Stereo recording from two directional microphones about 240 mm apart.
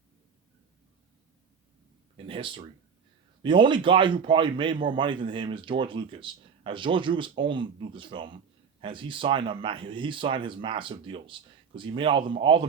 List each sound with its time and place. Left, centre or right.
2.1 s speech: right